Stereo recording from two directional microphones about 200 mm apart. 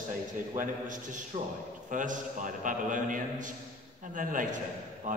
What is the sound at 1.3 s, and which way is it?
A man's voice, 35° right (ahead or behind).